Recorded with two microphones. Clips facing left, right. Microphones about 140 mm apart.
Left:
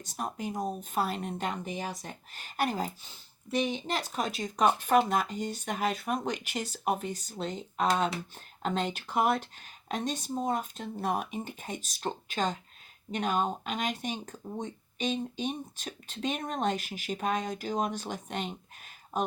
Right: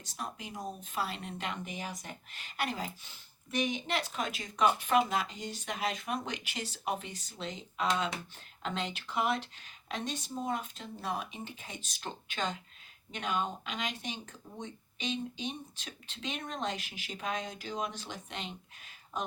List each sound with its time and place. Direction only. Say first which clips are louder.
0.0 s speech: left 6 dB; 45° left (ahead or behind)
3.5 s speech: left 3 dB; 30° left (ahead or behind); by 18.5 s 45° left (ahead or behind)